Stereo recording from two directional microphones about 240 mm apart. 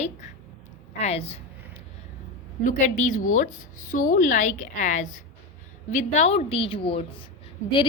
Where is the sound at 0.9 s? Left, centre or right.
Left.